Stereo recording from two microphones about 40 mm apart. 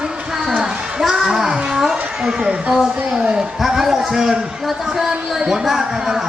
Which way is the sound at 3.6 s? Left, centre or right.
Centre.